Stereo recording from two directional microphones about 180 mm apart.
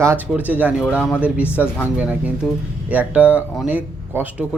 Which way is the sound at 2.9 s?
10° right (ahead or behind).